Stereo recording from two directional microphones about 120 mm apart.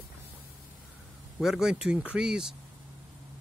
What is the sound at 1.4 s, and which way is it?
Speech, 5° right (ahead or behind).